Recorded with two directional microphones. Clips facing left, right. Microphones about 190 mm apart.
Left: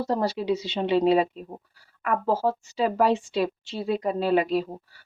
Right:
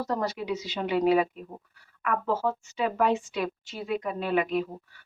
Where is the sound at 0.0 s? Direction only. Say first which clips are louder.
Left 4 dB; 30° left (ahead or behind).